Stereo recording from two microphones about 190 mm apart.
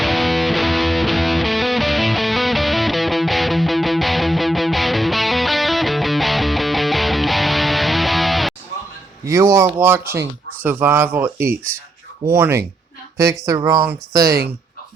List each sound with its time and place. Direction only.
0.0 s music: centre (ahead or behind)
9.2 s a sound: 15° right (ahead or behind)
9.8 s speech: 10° right (ahead or behind)